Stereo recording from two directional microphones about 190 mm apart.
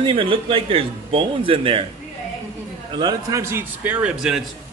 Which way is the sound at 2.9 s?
20° right (ahead or behind).